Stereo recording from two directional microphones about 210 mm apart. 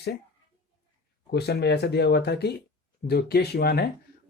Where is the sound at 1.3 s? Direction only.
50° left (ahead or behind).